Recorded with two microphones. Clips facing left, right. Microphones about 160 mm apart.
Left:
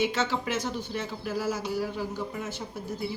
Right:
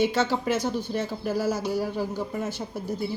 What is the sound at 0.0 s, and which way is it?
Speech, 35° right (ahead or behind).